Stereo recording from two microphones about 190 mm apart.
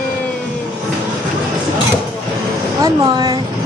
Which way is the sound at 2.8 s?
25° right (ahead or behind).